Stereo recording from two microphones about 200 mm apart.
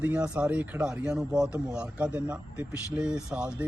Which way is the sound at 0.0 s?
5° right (ahead or behind).